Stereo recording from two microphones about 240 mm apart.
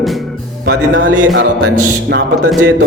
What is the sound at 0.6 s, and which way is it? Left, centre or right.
A man's voice, right.